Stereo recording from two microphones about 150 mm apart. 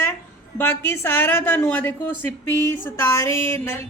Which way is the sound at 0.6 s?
15° left (ahead or behind).